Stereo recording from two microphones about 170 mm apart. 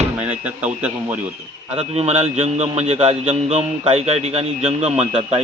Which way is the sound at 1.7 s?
35° right (ahead or behind).